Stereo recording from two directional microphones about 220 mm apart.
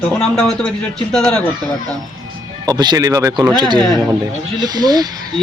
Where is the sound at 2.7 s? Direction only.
15° right (ahead or behind).